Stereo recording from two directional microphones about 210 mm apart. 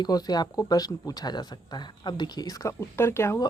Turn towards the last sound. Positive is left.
turn(degrees=10)  # may be behind; listen again after turning